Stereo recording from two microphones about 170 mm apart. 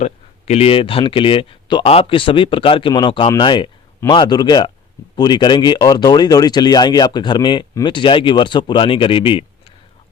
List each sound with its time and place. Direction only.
0.0 s speech: 40° left (ahead or behind)